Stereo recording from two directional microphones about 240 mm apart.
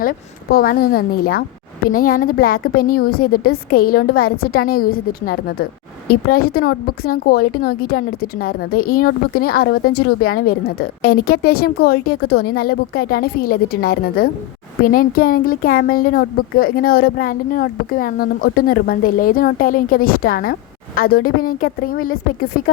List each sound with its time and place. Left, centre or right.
0.0 s a woman's voice: left